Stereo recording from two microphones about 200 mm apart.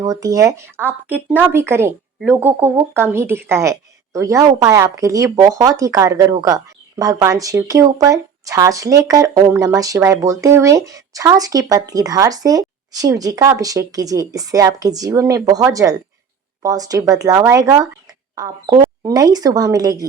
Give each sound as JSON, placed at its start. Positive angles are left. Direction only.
{"t": 0.0, "sound": "speech", "side_deg": -15}